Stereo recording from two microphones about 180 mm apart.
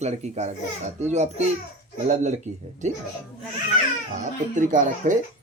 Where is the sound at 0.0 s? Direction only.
40° right (ahead or behind).